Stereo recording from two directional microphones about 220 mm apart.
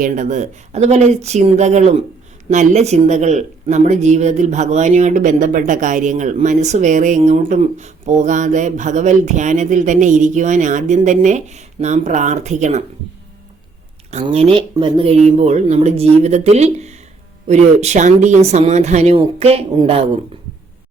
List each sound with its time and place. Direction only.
0.0 s speech: 35° right (ahead or behind)
14.1 s speech: 30° right (ahead or behind)